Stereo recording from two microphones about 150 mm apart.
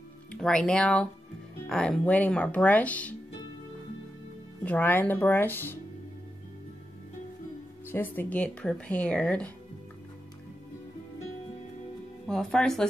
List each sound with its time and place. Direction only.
0.3 s speech: 5° left (ahead or behind)
4.6 s speech: 10° left (ahead or behind)
7.9 s speech: 10° left (ahead or behind)
12.3 s speech: 5° left (ahead or behind)